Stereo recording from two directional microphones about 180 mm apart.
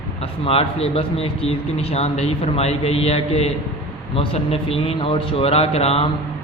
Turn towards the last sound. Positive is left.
turn(degrees=35)  # may be behind; listen again after turning